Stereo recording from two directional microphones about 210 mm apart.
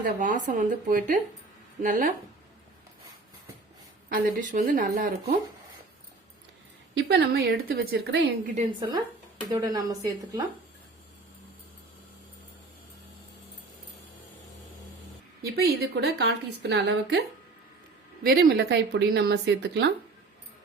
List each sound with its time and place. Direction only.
0.0 s speech: 40° right (ahead or behind)
4.1 s speech: 40° right (ahead or behind)
6.9 s a woman's voice: 55° right (ahead or behind)
9.5 s speech: 20° right (ahead or behind)
15.5 s a woman's voice: 50° right (ahead or behind)
18.7 s speech: 55° right (ahead or behind)